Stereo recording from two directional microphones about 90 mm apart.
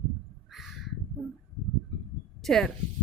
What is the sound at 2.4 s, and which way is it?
Speech, 5° left (ahead or behind).